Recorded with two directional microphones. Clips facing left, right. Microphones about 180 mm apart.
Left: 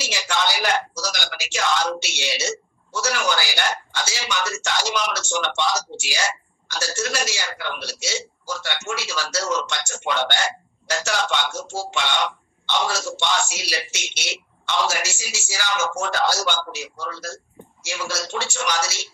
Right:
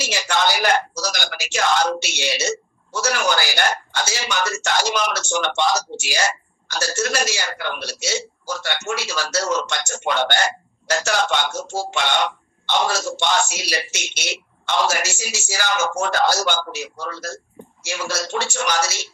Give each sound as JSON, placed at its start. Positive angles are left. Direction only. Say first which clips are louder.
{"t": 0.0, "sound": "speech", "louder": "right 3 dB", "side_deg": -50}